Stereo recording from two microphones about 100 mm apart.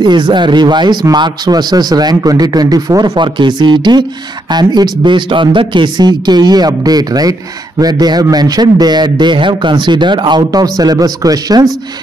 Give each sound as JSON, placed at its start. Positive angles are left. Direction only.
{"t": 0.0, "sound": "a man's voice", "side_deg": -50}